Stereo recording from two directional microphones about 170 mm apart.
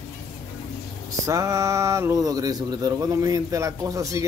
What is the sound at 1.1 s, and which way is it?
Speech, 20° right (ahead or behind).